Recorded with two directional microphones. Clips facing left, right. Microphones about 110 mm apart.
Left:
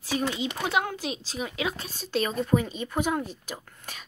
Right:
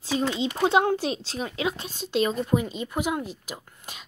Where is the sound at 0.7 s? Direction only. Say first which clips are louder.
Right 7 dB; 30° right (ahead or behind).